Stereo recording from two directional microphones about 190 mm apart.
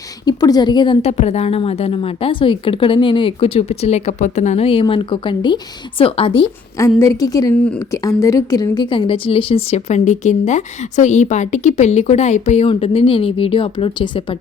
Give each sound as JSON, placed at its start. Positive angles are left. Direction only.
{"t": 0.3, "sound": "a woman's voice", "side_deg": 20}
{"t": 6.7, "sound": "a woman's voice", "side_deg": 15}